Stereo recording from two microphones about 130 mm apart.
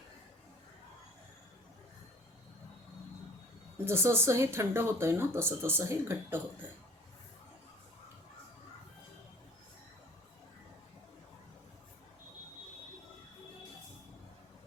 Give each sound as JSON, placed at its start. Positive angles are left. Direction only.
{"t": 3.8, "sound": "speech", "side_deg": -20}